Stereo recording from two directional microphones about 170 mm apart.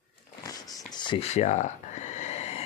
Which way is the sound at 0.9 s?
30° left (ahead or behind).